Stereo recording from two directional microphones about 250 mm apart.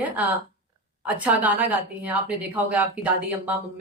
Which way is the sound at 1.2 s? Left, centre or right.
Centre.